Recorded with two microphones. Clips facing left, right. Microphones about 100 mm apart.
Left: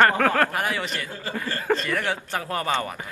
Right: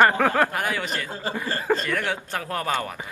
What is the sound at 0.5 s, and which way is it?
Speech, centre (ahead or behind).